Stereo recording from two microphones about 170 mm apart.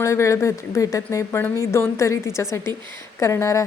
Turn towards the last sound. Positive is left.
turn(degrees=15)  # may be behind; listen again after turning